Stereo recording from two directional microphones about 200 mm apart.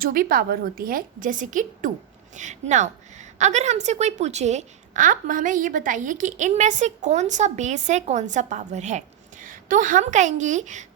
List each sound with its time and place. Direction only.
0.0 s a woman's voice: 45° right (ahead or behind)